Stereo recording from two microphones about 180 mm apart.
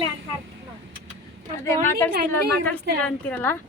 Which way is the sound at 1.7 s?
15° left (ahead or behind).